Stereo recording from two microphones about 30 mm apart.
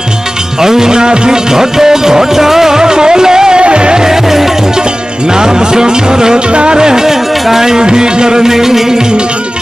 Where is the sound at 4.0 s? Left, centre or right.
Centre.